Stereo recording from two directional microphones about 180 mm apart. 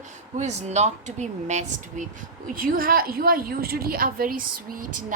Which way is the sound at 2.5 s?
50° right (ahead or behind).